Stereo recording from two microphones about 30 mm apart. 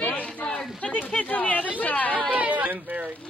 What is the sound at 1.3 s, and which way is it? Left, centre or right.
Speech, left.